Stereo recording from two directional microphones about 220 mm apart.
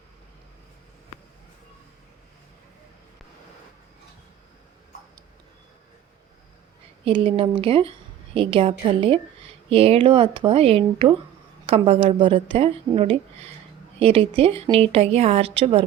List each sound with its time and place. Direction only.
7.0 s speech: 25° right (ahead or behind)